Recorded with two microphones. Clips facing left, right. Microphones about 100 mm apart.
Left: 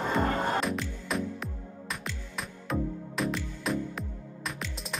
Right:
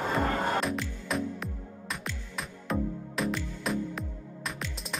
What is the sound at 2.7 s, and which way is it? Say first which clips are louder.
Music: even; centre (ahead or behind).